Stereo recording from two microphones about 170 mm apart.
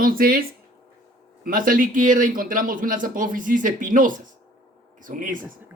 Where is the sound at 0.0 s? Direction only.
60° right (ahead or behind).